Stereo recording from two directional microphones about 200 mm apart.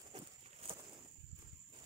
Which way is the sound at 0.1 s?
30° right (ahead or behind).